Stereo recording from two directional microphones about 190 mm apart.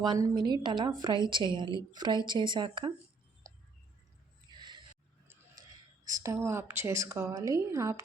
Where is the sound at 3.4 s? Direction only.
15° right (ahead or behind).